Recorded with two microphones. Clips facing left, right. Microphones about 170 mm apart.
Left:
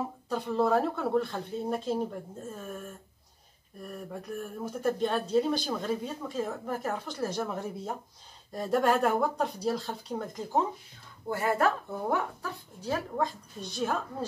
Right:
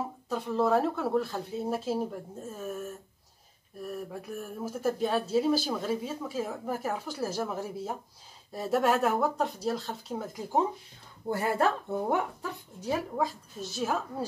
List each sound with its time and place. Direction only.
0.3 s speech: centre (ahead or behind)
11.4 s speech: 25° right (ahead or behind)
13.2 s speech: 5° right (ahead or behind)